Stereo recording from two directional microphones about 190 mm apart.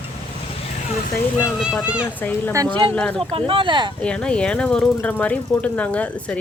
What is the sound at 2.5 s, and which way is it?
Speech, 20° right (ahead or behind).